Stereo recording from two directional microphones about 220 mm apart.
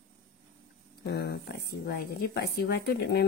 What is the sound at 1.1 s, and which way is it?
Speech, 45° left (ahead or behind).